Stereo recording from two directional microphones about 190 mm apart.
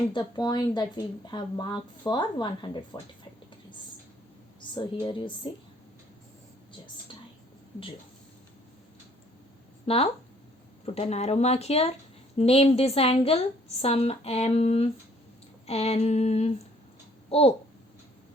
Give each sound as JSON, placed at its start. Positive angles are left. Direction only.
{"t": 0.1, "sound": "speech", "side_deg": 20}
{"t": 4.7, "sound": "speech", "side_deg": 25}
{"t": 9.8, "sound": "speech", "side_deg": 30}